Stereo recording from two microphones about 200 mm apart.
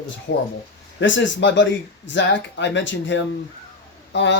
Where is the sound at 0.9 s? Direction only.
65° left (ahead or behind).